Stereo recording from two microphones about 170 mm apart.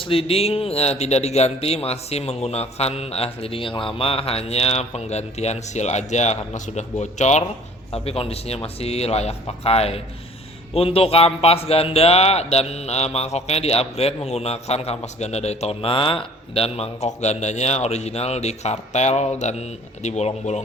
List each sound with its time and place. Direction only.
0.0 s speech: 30° left (ahead or behind)